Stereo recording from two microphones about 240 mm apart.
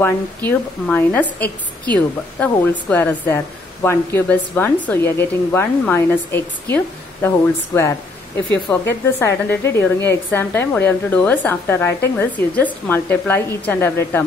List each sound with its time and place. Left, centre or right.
0.0 s speech: centre